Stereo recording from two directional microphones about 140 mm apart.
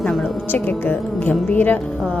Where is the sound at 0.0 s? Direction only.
5° left (ahead or behind).